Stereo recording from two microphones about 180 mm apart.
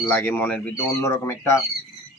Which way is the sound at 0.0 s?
10° left (ahead or behind).